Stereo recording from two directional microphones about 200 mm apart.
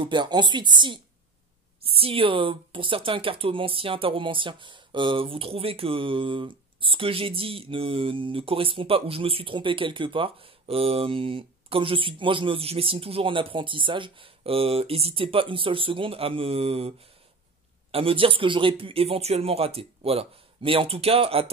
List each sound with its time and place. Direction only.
0.0 s speech: 20° right (ahead or behind)
17.9 s speech: 25° right (ahead or behind)